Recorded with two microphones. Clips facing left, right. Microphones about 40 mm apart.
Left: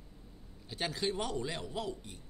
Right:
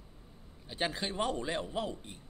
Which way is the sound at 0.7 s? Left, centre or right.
Right.